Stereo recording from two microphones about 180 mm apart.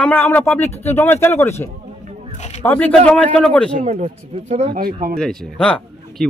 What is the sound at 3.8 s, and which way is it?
Speech, 35° right (ahead or behind).